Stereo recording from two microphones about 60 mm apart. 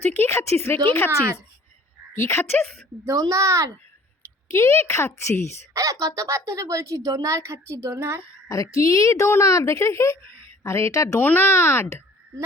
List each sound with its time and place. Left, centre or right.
0.0 s a woman's voice: left
1.1 s a woman's voice: right
2.1 s a woman's voice: left
3.1 s a woman's voice: right
4.4 s a woman's voice: left
5.7 s a woman's voice: right
8.4 s a woman's voice: left
10.9 s speech: left
11.2 s a child's voice: left